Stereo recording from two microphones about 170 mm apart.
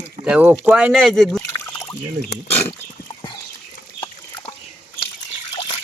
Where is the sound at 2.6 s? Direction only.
25° left (ahead or behind).